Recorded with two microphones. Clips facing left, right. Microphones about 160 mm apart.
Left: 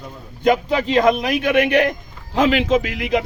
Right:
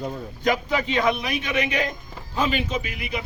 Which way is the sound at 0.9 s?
45° left (ahead or behind).